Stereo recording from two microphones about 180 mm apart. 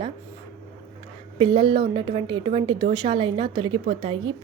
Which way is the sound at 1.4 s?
25° right (ahead or behind).